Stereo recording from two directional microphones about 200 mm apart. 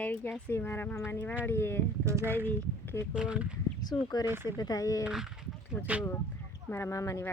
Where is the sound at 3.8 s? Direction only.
20° left (ahead or behind).